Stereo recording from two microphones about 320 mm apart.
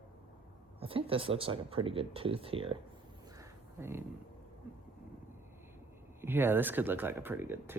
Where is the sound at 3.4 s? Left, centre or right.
Centre.